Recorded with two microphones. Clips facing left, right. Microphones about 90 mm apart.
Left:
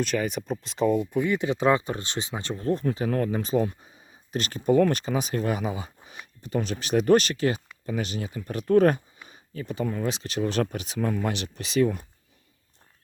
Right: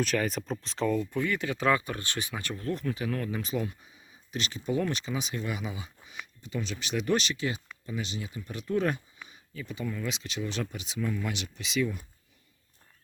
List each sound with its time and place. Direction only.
0.0 s speech: centre (ahead or behind)
0.9 s speech: 15° left (ahead or behind); by 12.0 s 45° left (ahead or behind)